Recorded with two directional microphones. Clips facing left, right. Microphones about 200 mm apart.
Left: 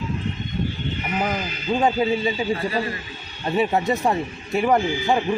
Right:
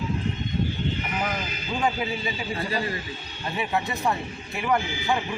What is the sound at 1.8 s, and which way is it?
Speech, 30° left (ahead or behind).